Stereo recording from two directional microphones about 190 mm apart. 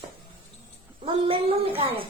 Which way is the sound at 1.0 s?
30° right (ahead or behind).